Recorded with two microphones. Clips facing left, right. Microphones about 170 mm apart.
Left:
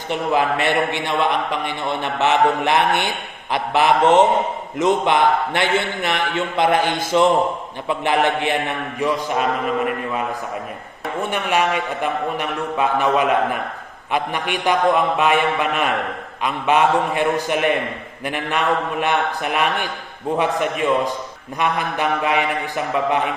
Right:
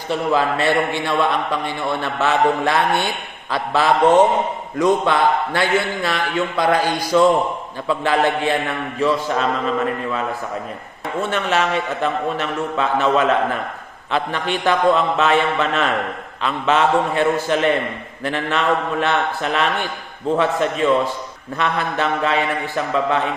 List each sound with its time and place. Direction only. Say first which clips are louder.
0.1 s a man's voice: right 1 dB; 20° left (ahead or behind)